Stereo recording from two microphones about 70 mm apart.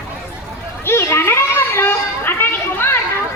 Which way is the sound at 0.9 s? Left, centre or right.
Left.